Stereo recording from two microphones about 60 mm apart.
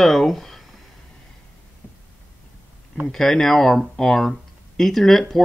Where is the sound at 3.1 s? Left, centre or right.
Centre.